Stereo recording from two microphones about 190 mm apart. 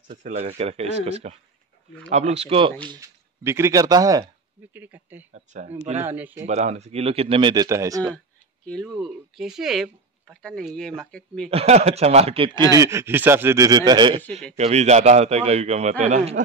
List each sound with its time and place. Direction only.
0.2 s a man's voice: 35° right (ahead or behind)
2.9 s speech: 15° right (ahead or behind)
5.3 s a man's voice: 40° right (ahead or behind)
6.0 s speech: 10° right (ahead or behind)
6.4 s a man's voice: 35° right (ahead or behind); by 8.1 s 15° right (ahead or behind)
8.6 s speech: centre (ahead or behind)
11.5 s speech: 35° right (ahead or behind)
14.6 s a man's voice: 35° right (ahead or behind)